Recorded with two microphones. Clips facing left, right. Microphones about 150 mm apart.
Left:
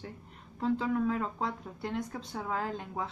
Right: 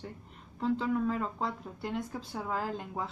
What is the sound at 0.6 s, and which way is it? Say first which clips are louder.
Speech: even; centre (ahead or behind).